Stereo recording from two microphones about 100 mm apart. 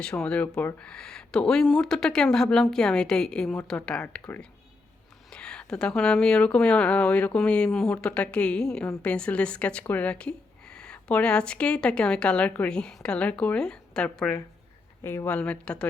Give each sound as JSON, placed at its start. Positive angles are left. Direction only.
{"t": 0.0, "sound": "a woman's voice", "side_deg": 10}
{"t": 15.0, "sound": "speech", "side_deg": 25}
{"t": 15.3, "sound": "a woman's voice", "side_deg": 10}